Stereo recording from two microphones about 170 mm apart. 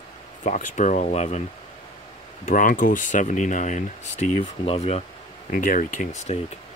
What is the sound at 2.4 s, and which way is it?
Speech, 50° left (ahead or behind).